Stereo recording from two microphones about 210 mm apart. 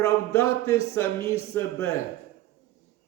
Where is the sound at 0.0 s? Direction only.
10° left (ahead or behind).